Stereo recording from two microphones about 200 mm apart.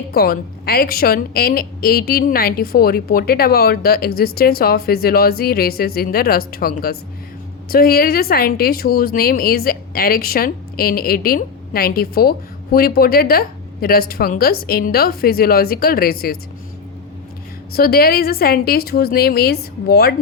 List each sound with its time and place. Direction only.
0.1 s a woman's voice: 50° left (ahead or behind)
17.7 s a woman's voice: 50° left (ahead or behind)